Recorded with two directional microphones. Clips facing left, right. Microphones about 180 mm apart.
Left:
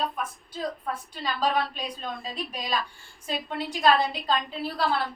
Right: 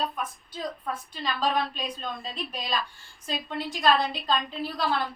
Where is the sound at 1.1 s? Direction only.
10° left (ahead or behind).